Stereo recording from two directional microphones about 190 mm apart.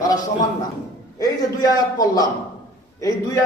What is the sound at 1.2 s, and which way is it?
A man's voice, 20° left (ahead or behind).